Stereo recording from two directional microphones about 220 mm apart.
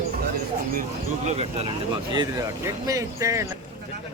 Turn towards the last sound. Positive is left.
turn(degrees=-15)  # may be behind; listen again after turning